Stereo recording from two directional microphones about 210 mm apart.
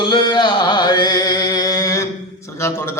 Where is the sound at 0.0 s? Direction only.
20° left (ahead or behind).